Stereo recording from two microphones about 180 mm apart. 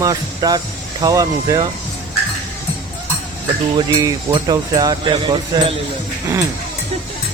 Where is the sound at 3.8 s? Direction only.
20° right (ahead or behind).